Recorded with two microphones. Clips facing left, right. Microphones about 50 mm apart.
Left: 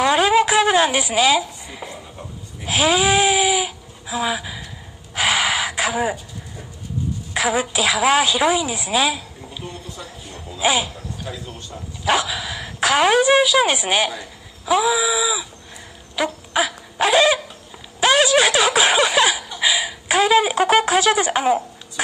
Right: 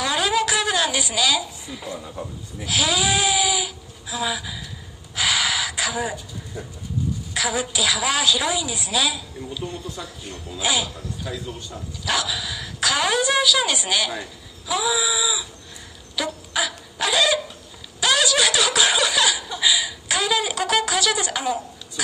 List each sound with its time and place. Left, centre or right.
0.0 s a sound: left
2.6 s bleat: left
5.1 s gasp: left
7.3 s a woman's voice: left
11.3 s speech: centre
12.0 s a woman's voice: left
16.2 s a sound: left
18.0 s snicker: left